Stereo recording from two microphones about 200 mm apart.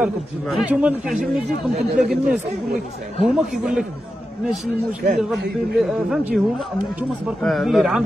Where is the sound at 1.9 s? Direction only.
45° right (ahead or behind).